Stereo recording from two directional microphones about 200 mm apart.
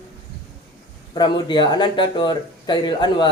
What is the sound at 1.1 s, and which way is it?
Speech, 20° left (ahead or behind).